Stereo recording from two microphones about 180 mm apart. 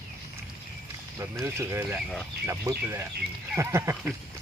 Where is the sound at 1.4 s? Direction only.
15° right (ahead or behind).